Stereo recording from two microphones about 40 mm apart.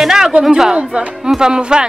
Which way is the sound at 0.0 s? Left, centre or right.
Centre.